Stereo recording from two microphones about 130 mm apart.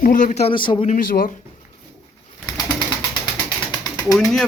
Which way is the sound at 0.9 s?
90° left.